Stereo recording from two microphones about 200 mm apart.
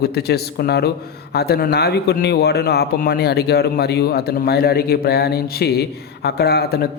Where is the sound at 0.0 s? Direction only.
50° left (ahead or behind).